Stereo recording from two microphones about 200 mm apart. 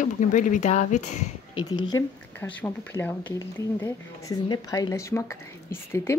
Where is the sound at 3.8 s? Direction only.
20° left (ahead or behind).